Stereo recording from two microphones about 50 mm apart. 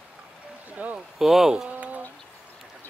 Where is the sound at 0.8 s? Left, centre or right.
Right.